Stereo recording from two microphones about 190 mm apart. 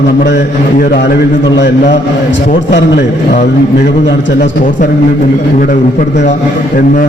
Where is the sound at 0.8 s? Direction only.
55° left (ahead or behind).